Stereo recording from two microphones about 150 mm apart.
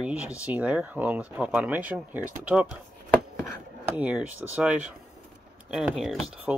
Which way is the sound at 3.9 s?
10° right (ahead or behind).